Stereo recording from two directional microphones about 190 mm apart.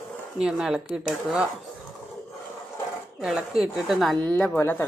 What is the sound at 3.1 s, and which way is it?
Speech, centre (ahead or behind).